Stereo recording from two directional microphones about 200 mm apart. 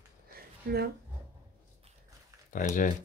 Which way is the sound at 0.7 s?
50° right (ahead or behind).